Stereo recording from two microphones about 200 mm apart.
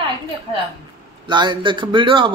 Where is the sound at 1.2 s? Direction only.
25° right (ahead or behind).